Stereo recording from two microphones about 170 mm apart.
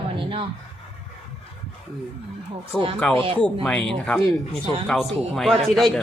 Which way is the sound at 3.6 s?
5° left (ahead or behind).